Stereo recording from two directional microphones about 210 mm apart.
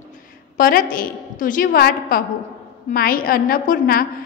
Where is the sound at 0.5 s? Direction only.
40° left (ahead or behind).